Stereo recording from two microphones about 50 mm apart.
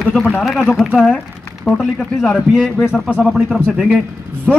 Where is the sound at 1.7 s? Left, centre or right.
Left.